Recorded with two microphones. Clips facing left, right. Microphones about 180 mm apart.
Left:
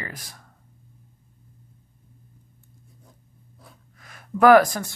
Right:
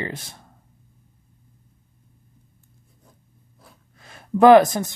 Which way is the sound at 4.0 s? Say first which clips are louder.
Right 4 dB; 25° right (ahead or behind).